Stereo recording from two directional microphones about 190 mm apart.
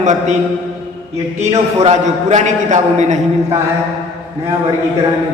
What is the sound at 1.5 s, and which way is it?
A man's voice, 35° right (ahead or behind).